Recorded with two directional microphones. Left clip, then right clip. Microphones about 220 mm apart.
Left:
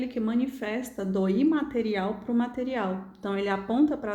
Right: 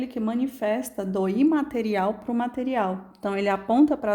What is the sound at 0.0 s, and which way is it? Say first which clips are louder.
A woman's voice: right 1 dB; 40° right (ahead or behind).